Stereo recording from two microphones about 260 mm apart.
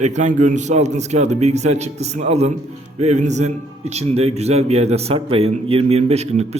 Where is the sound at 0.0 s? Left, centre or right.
Right.